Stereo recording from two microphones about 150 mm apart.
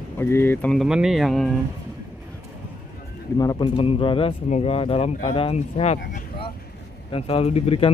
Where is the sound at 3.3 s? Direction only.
25° left (ahead or behind).